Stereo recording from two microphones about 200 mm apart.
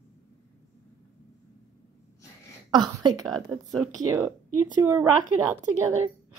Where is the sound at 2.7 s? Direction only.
20° right (ahead or behind).